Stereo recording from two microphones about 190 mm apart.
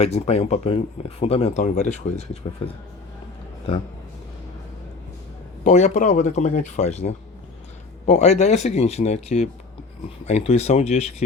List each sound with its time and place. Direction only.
0.0 s speech: 35° left (ahead or behind)
5.6 s speech: 40° left (ahead or behind)